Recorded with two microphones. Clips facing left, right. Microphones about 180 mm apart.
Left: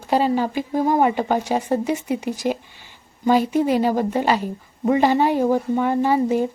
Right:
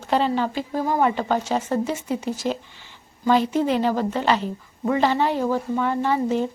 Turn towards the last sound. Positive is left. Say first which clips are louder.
# left 3 dB
turn(degrees=10)  # may be behind; listen again after turning